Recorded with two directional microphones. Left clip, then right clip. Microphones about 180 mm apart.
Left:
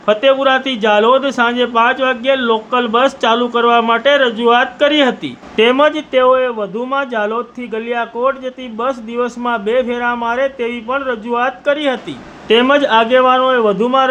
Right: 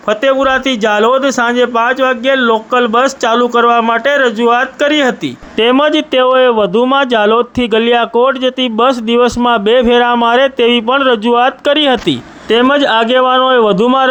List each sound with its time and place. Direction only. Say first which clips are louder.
0.1 s speech: right 1 dB; 30° right (ahead or behind)
5.5 s speech: right 1 dB; 45° right (ahead or behind)
12.5 s speech: right 1 dB; 35° right (ahead or behind); by 14.1 s 55° right (ahead or behind)